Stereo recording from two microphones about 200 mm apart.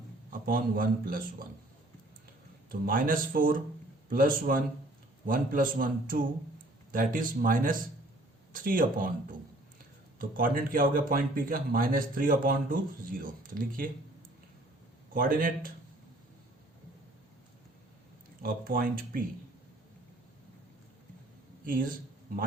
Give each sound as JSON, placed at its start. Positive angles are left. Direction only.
{"t": 0.3, "sound": "a man's voice", "side_deg": -45}
{"t": 2.8, "sound": "a man's voice", "side_deg": -45}
{"t": 10.2, "sound": "a man's voice", "side_deg": -45}
{"t": 15.1, "sound": "a man's voice", "side_deg": -45}
{"t": 18.4, "sound": "a man's voice", "side_deg": -45}
{"t": 21.7, "sound": "a man's voice", "side_deg": -45}